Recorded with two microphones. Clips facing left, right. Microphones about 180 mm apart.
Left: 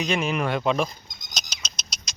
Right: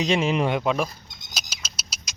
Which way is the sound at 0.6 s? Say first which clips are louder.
Left 1 dB; 5° right (ahead or behind).